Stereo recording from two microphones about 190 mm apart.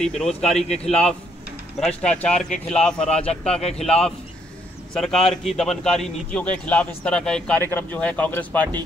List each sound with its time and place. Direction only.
0.0 s a man's voice: 5° left (ahead or behind)
3.1 s a man's voice: 30° left (ahead or behind)
3.7 s a man's voice: 5° left (ahead or behind)